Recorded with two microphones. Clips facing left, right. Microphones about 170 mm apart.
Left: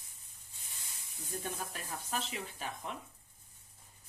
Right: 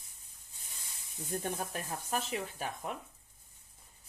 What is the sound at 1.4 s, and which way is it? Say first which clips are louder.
Speech: right 3 dB; 55° right (ahead or behind).